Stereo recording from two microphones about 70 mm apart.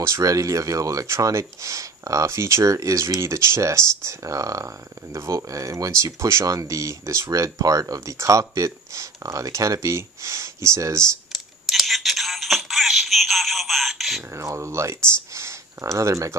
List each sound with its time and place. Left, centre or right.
0.0 s speech: right
11.3 s music: centre
14.3 s speech: right